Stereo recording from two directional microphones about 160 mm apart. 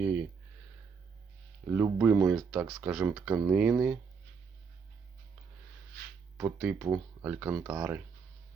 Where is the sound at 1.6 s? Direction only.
10° right (ahead or behind).